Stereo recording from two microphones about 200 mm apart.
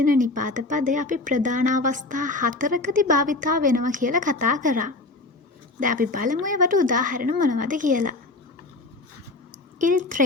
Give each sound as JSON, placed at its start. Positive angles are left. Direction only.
{"t": 0.0, "sound": "speech", "side_deg": -40}
{"t": 9.7, "sound": "speech", "side_deg": -40}